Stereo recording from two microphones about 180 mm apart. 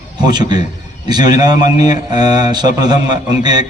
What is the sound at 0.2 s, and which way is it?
A man's voice, 25° right (ahead or behind).